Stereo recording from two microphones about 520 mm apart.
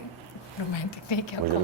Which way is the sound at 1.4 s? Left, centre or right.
Left.